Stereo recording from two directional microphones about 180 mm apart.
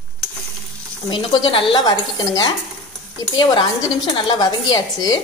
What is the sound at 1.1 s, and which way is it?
Speech, 25° left (ahead or behind).